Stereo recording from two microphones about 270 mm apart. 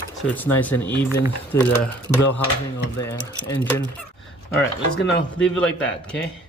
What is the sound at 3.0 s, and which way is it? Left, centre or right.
Speech, centre.